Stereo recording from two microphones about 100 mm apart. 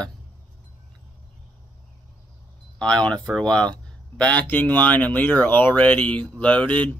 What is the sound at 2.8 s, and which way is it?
Speech, 10° left (ahead or behind).